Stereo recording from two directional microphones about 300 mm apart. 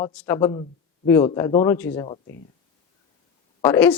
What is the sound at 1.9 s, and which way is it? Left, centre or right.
Speech, centre.